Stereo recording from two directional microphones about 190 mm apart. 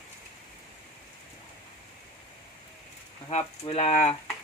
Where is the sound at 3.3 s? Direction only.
35° left (ahead or behind).